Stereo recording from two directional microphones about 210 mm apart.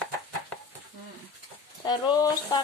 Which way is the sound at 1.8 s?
20° left (ahead or behind).